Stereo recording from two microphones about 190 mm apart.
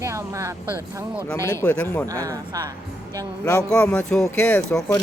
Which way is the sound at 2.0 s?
15° right (ahead or behind).